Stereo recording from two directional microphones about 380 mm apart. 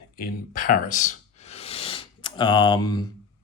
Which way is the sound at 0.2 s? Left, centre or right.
Left.